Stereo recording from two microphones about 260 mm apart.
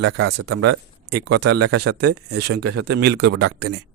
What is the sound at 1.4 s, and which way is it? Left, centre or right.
Speech, right.